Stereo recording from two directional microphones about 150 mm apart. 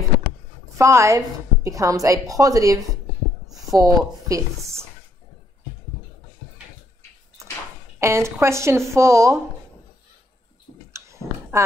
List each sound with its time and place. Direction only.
0.7 s a woman's voice: 20° right (ahead or behind)
8.0 s a woman's voice: 20° right (ahead or behind)
10.9 s a sound: 20° right (ahead or behind)